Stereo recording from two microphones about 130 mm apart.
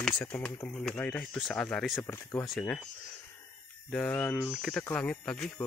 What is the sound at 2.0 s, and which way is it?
Speech, 20° left (ahead or behind).